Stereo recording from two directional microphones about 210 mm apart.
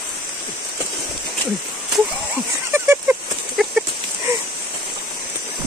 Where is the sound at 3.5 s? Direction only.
Centre (ahead or behind).